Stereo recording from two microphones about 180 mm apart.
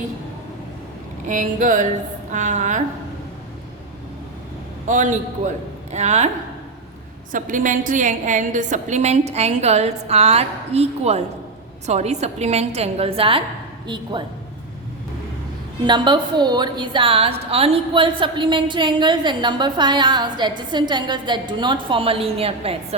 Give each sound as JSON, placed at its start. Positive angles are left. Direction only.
{"t": 1.3, "sound": "a sound", "side_deg": -45}
{"t": 2.3, "sound": "a woman's voice", "side_deg": -40}
{"t": 4.9, "sound": "a sound", "side_deg": -45}
{"t": 5.9, "sound": "a woman's voice", "side_deg": -40}
{"t": 7.3, "sound": "a woman's voice", "side_deg": -45}
{"t": 15.9, "sound": "a woman's voice", "side_deg": -25}